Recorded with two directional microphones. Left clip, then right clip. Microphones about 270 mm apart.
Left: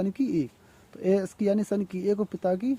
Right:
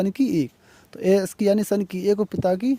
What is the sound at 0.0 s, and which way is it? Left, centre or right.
Speech, right.